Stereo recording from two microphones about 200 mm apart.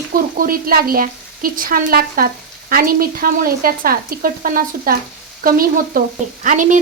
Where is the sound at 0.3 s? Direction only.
45° right (ahead or behind).